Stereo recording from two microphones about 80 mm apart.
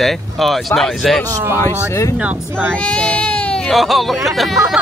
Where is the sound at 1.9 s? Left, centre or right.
Left.